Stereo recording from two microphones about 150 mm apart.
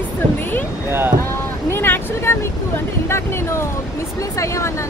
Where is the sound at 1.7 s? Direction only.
15° left (ahead or behind).